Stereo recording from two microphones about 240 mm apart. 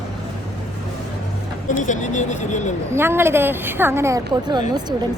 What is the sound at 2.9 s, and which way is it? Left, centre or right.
A woman's voice, centre.